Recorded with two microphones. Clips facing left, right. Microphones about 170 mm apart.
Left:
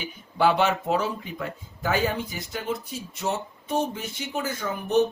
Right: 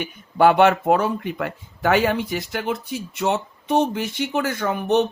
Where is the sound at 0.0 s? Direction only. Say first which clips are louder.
Right 6 dB; 60° right (ahead or behind).